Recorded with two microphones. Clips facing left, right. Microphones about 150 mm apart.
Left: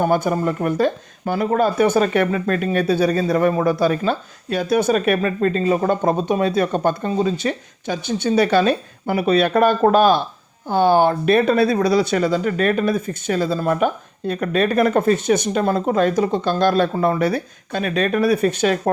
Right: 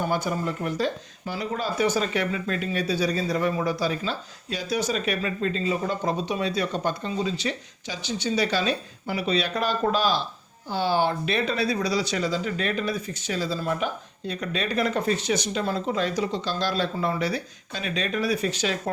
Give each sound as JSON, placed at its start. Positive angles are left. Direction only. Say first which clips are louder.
{"t": 0.0, "sound": "speech", "louder": "left 8 dB", "side_deg": 55}